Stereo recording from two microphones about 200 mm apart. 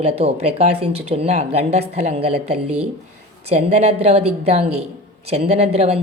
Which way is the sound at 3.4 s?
30° right (ahead or behind).